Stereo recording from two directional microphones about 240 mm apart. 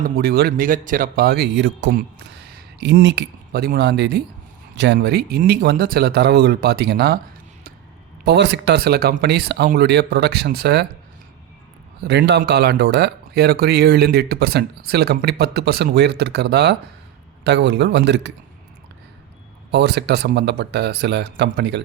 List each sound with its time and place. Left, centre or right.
0.2 s speech: right
8.2 s speech: right
12.0 s speech: right
19.7 s speech: right